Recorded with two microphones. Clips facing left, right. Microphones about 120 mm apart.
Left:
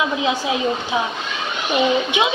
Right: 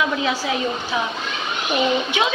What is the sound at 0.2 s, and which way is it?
Speech, 20° left (ahead or behind).